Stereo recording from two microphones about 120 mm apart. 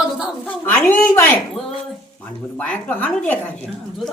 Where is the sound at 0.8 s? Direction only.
10° left (ahead or behind).